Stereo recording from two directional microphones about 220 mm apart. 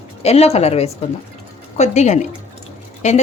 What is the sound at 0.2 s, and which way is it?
A woman's voice, 30° left (ahead or behind).